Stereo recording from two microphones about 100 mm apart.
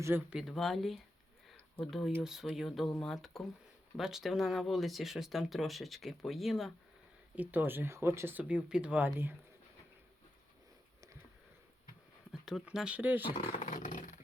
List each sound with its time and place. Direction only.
0.0 s speech: 20° right (ahead or behind)
0.3 s speech: centre (ahead or behind)
7.3 s speech: 20° right (ahead or behind)
12.3 s speech: 5° right (ahead or behind)